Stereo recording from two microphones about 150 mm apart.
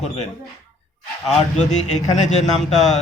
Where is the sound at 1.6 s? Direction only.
50° left (ahead or behind).